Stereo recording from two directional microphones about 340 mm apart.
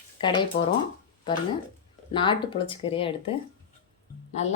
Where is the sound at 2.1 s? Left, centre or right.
Centre.